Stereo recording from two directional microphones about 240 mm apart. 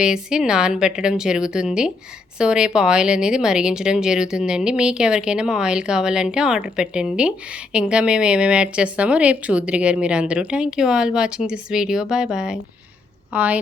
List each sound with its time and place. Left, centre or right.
0.0 s speech: centre